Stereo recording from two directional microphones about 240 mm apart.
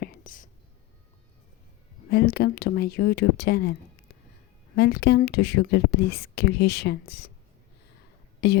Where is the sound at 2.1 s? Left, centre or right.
Left.